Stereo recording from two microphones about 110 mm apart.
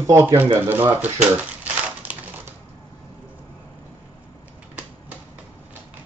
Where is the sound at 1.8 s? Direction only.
15° right (ahead or behind).